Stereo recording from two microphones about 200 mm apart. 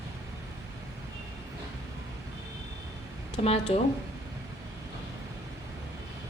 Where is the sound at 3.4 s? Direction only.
30° left (ahead or behind).